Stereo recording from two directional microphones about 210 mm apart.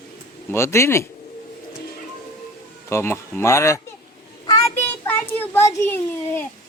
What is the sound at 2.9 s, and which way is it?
Speech, 10° left (ahead or behind).